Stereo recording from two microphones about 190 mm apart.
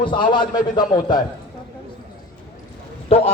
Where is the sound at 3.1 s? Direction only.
30° left (ahead or behind).